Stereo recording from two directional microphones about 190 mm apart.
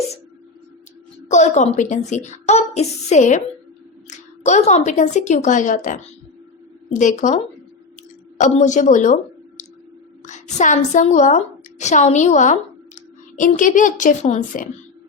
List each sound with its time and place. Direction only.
1.3 s a child's voice: 40° left (ahead or behind)
10.2 s a woman's voice: 40° left (ahead or behind)